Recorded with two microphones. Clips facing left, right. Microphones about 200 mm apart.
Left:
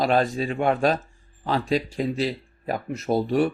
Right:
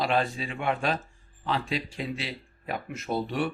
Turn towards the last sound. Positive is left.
turn(degrees=40)  # may be behind; listen again after turning